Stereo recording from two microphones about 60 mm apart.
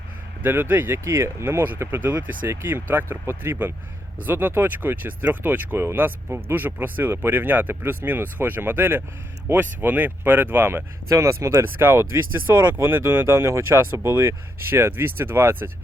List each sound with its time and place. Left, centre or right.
0.4 s speech: right
5.8 s speech: right
6.1 s speech: right
11.1 s speech: right
11.6 s speech: right